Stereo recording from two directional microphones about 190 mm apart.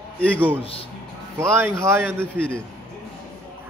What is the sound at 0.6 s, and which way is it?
Speech, 30° left (ahead or behind).